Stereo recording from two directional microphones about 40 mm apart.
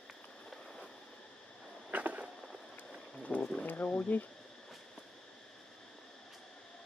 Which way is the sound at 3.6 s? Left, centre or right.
Left.